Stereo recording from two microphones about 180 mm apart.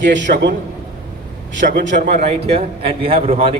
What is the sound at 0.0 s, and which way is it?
Speech, 85° right.